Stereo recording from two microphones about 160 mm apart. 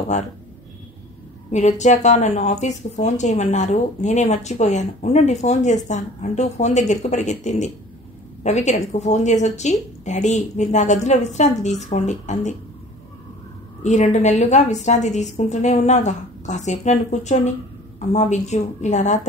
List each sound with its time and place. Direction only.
1.5 s speech: 50° left (ahead or behind)
13.8 s speech: 50° left (ahead or behind)